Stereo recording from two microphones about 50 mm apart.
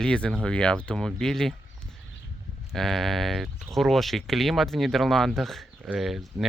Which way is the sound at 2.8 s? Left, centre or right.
Centre.